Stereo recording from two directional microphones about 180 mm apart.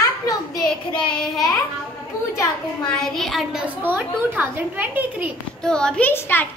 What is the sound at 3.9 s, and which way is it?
A woman's voice, 10° right (ahead or behind).